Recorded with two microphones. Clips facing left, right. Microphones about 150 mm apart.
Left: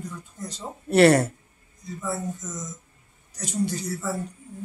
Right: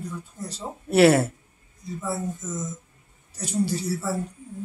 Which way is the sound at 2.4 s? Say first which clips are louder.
Right 4 dB; 30° right (ahead or behind).